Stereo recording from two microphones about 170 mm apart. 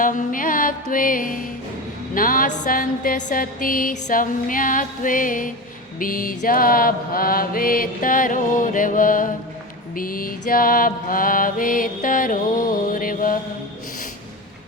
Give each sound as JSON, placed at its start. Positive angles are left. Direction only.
{"t": 0.0, "sound": "music", "side_deg": 50}
{"t": 2.1, "sound": "mantra", "side_deg": 55}